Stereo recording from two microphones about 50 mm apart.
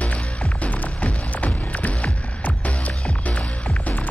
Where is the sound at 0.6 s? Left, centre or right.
Left.